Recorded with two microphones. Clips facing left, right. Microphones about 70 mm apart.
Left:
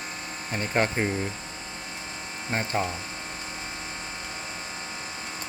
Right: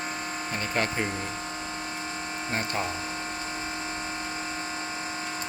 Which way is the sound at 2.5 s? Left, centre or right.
Left.